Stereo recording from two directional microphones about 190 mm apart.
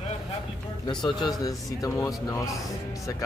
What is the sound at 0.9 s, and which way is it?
A man's voice, 20° left (ahead or behind).